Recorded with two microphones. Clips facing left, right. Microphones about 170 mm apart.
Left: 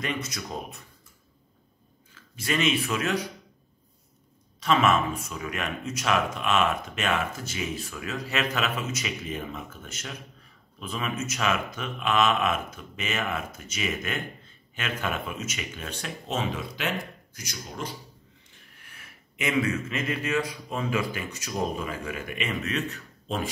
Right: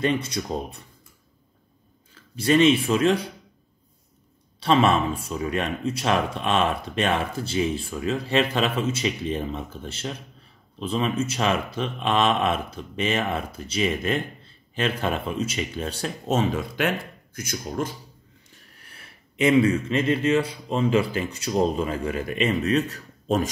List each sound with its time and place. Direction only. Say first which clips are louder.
0.0 s speech: right 8 dB; 30° right (ahead or behind)
2.1 s a man's voice: right 9 dB; 30° right (ahead or behind)
4.6 s speech: right 3 dB; 30° right (ahead or behind); by 17.9 s 50° right (ahead or behind)
18.5 s speech: right 4 dB; 35° right (ahead or behind)